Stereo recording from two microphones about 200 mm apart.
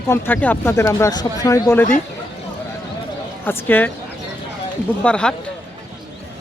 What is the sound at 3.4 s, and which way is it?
Speech, 10° left (ahead or behind).